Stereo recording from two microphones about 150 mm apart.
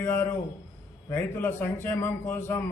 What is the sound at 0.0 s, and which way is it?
A man's voice, 15° left (ahead or behind).